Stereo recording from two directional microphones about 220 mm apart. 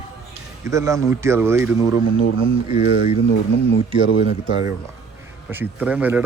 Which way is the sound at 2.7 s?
30° left (ahead or behind).